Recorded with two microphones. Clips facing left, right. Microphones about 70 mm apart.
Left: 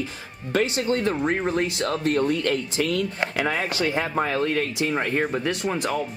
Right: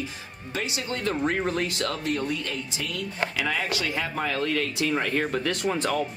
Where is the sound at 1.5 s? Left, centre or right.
Left.